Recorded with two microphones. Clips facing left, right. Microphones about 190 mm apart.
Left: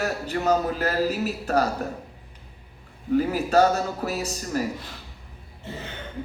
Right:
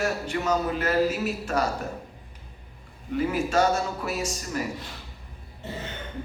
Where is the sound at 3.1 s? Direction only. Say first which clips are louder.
Left 4 dB; 40° left (ahead or behind).